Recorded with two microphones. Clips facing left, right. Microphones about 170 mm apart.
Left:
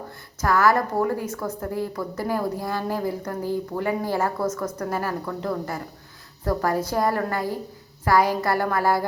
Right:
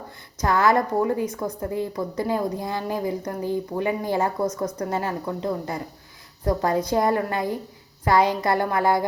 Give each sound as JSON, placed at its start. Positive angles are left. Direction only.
{"t": 0.4, "sound": "a woman's voice", "side_deg": -20}